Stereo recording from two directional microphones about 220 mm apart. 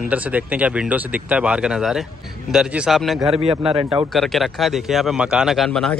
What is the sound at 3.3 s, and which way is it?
Speech, 25° right (ahead or behind).